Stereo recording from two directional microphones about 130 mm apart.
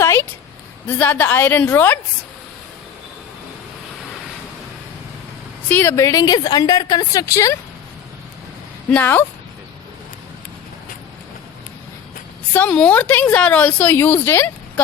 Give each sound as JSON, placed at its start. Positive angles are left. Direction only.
{"t": 0.0, "sound": "a sound", "side_deg": 20}
{"t": 0.9, "sound": "a woman's voice", "side_deg": 15}
{"t": 5.6, "sound": "a woman's voice", "side_deg": 15}
{"t": 5.9, "sound": "a woman's voice", "side_deg": 25}
{"t": 8.9, "sound": "a woman's voice", "side_deg": 15}
{"t": 12.5, "sound": "a woman's voice", "side_deg": 10}